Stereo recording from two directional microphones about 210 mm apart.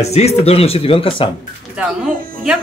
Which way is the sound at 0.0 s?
30° left (ahead or behind).